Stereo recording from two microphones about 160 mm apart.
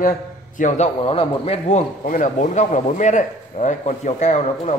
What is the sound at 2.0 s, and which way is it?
A man's voice, 55° left (ahead or behind).